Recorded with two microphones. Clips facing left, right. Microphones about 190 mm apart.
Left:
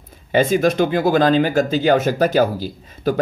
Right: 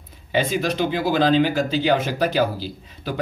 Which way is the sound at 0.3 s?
50° left (ahead or behind).